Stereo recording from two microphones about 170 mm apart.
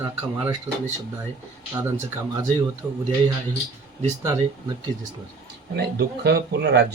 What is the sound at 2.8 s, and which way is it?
Speech, 10° right (ahead or behind).